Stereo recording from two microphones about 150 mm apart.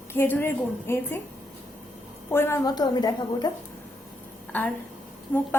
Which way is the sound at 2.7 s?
30° left (ahead or behind).